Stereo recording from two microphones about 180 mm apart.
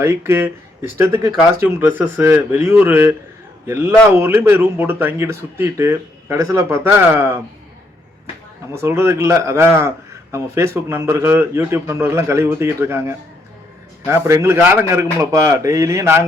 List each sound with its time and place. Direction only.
0.0 s speech: 15° right (ahead or behind)
8.7 s speech: 15° right (ahead or behind)